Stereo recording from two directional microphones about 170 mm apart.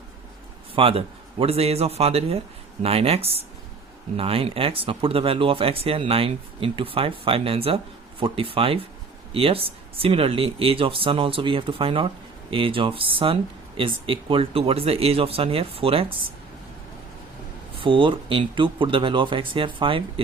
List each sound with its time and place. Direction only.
0.8 s speech: 35° right (ahead or behind)
17.7 s speech: 30° right (ahead or behind)